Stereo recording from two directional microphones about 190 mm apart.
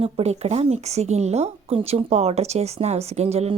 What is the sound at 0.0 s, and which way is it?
Speech, 35° right (ahead or behind).